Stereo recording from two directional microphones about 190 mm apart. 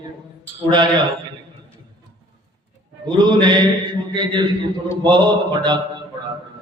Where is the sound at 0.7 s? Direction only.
25° right (ahead or behind).